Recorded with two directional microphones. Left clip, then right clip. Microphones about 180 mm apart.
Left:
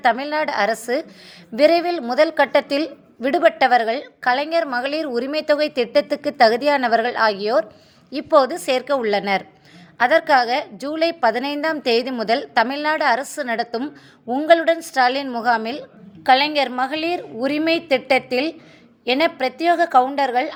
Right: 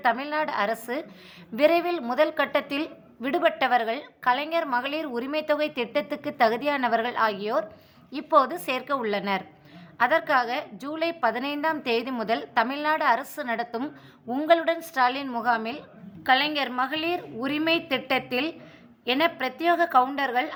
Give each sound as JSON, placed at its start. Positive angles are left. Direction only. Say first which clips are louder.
{"t": 0.0, "sound": "a woman's voice", "louder": "left 6 dB", "side_deg": 25}